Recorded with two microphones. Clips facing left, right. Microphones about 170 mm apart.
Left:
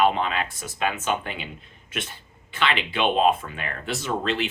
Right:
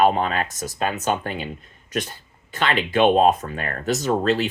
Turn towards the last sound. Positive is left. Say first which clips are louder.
# right 6 dB
turn(degrees=-40)  # may be behind; listen again after turning